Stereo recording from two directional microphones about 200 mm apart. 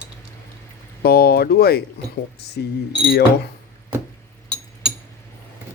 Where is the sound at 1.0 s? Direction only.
50° left (ahead or behind).